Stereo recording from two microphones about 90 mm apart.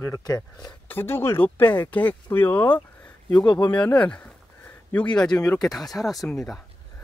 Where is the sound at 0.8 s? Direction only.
25° left (ahead or behind).